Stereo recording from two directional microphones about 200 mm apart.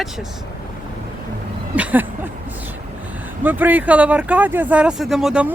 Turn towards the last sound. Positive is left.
turn(degrees=-5)  # may be behind; listen again after turning